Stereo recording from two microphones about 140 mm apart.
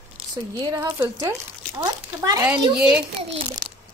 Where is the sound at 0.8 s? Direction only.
15° right (ahead or behind).